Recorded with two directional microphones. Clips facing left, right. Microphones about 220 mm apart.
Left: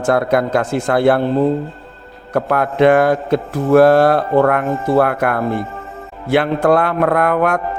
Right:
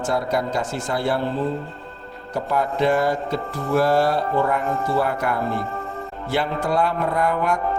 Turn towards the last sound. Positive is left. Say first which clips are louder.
# left 6 dB
turn(degrees=60)  # may be behind; listen again after turning